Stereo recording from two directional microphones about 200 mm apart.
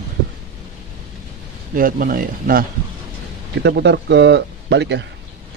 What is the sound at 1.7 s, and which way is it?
Speech, 45° right (ahead or behind).